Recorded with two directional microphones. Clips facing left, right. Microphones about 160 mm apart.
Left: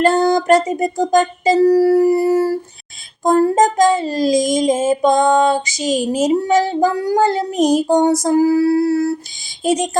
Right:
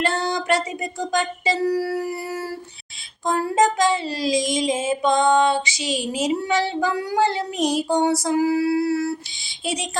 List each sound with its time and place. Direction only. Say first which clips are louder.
0.0 s speech: left 10 dB; 45° left (ahead or behind)